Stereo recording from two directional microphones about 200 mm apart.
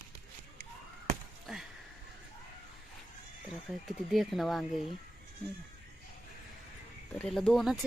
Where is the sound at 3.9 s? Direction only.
Centre (ahead or behind).